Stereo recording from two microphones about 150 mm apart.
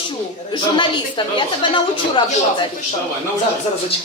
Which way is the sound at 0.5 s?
30° left (ahead or behind).